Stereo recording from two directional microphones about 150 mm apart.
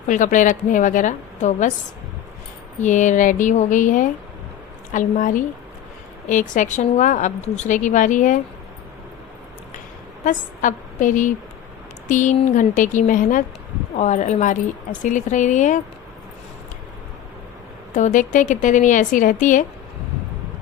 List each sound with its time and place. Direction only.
0.1 s a woman's voice: 55° left (ahead or behind)
2.8 s a woman's voice: 55° left (ahead or behind)
10.2 s a woman's voice: 60° left (ahead or behind)
13.9 s a woman's voice: 50° left (ahead or behind)
17.9 s a woman's voice: 55° left (ahead or behind)